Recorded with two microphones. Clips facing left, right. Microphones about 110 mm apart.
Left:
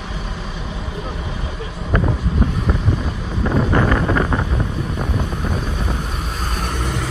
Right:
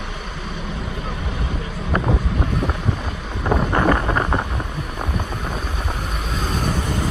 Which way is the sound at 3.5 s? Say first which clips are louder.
Even; 15° right (ahead or behind).